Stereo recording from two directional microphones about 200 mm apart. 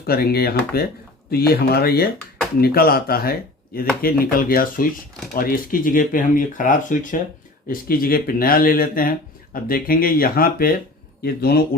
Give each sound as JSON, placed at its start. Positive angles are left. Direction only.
{"t": 0.1, "sound": "speech", "side_deg": 50}